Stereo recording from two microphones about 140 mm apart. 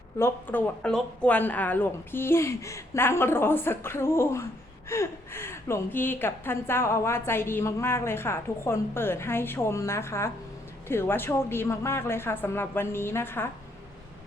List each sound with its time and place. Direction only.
0.2 s a woman's voice: 15° left (ahead or behind)